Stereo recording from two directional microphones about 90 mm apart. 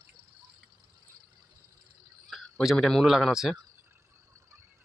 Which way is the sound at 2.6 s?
5° right (ahead or behind).